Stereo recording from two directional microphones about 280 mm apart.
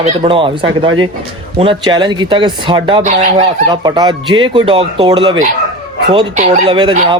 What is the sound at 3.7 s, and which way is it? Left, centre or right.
Speech, centre.